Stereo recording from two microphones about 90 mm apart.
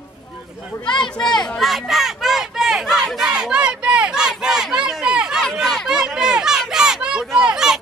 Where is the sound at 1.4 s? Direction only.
5° left (ahead or behind).